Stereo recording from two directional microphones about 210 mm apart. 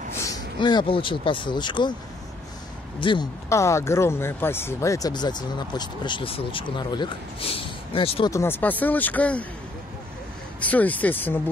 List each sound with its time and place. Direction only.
0.2 s speech: 20° left (ahead or behind)
3.0 s speech: 20° left (ahead or behind)
8.3 s speech: 10° left (ahead or behind)
10.6 s speech: 5° left (ahead or behind)